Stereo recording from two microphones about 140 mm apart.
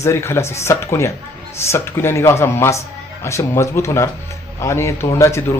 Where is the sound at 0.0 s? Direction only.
20° left (ahead or behind).